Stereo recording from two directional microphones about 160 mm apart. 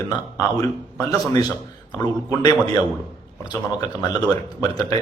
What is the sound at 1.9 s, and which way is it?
Speech, 25° left (ahead or behind).